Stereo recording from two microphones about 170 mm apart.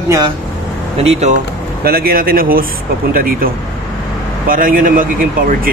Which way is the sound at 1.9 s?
60° right (ahead or behind).